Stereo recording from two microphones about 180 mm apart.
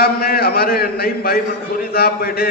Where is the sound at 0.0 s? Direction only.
60° left (ahead or behind).